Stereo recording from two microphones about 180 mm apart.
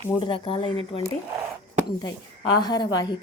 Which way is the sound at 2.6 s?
25° left (ahead or behind).